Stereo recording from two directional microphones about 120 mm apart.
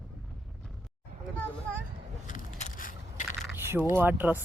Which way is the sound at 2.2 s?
85° left.